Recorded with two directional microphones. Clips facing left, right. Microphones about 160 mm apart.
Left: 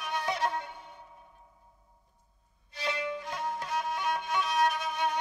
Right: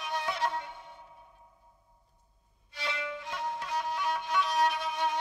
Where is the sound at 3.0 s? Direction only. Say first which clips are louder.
Left 2 dB; 40° left (ahead or behind).